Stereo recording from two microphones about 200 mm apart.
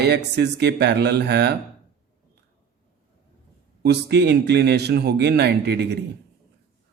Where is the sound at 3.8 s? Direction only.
55° right (ahead or behind).